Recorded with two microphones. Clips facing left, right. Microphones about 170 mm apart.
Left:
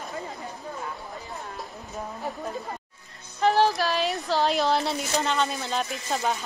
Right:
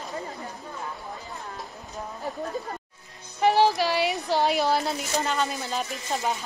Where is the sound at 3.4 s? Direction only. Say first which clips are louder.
Right 1 dB; 15° right (ahead or behind).